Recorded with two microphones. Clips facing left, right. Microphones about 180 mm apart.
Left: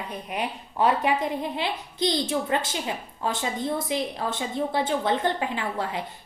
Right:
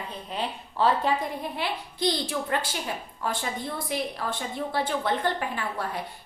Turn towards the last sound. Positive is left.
turn(degrees=20)  # may be behind; listen again after turning